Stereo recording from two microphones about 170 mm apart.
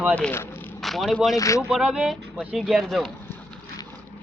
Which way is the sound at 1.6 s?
5° right (ahead or behind).